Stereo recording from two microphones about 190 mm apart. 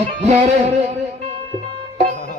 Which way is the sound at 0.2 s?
35° right (ahead or behind).